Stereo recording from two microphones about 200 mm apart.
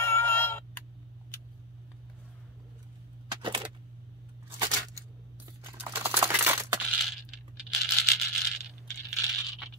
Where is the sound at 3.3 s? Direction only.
20° right (ahead or behind).